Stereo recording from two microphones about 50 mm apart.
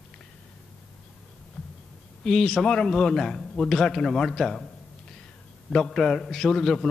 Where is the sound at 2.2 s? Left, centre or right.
Centre.